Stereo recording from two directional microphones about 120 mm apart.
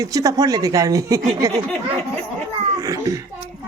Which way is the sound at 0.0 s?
30° right (ahead or behind).